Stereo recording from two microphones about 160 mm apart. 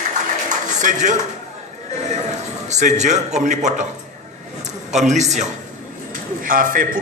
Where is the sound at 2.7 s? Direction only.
45° right (ahead or behind).